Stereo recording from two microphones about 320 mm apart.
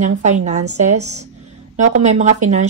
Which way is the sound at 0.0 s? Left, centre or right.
Right.